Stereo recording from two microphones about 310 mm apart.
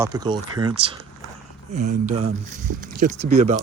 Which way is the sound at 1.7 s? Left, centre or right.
Right.